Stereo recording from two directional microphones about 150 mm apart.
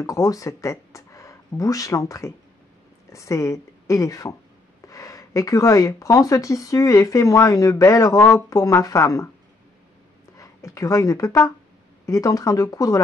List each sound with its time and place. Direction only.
0.0 s a woman's voice: 20° left (ahead or behind)
10.3 s speech: 20° left (ahead or behind)